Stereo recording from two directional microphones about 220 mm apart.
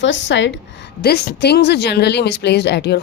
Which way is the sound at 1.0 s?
45° left (ahead or behind).